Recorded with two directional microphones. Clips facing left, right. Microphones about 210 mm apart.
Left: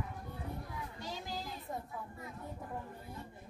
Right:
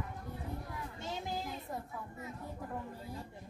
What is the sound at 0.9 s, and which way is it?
Speech, 25° right (ahead or behind).